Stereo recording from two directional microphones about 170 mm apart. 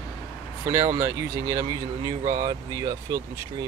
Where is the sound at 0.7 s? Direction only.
15° right (ahead or behind).